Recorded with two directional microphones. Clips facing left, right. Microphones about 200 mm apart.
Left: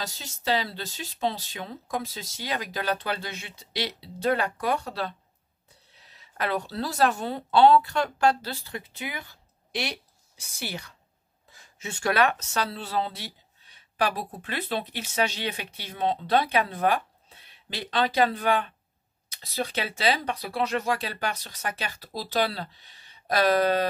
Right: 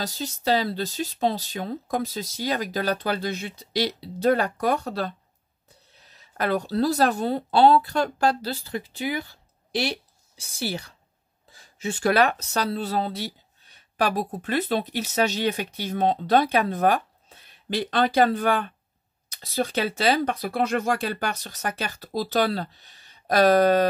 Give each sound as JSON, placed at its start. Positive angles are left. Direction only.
{"t": 0.0, "sound": "speech", "side_deg": -40}